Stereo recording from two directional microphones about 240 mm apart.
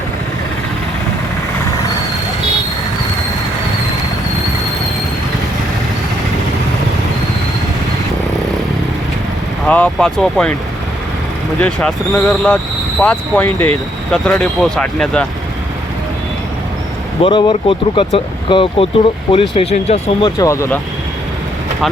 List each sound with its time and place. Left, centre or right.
9.6 s speech: centre
11.6 s speech: centre
17.2 s speech: left
20.4 s speech: centre